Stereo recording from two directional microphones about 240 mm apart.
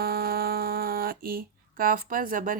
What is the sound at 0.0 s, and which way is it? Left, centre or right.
Speech, right.